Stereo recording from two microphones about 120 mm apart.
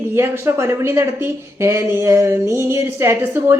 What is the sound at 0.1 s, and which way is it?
A woman's voice, 20° right (ahead or behind).